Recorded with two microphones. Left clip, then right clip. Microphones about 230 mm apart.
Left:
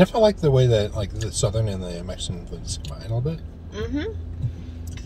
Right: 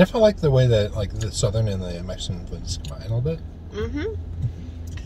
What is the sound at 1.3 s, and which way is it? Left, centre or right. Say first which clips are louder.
Speech: right 1 dB; centre.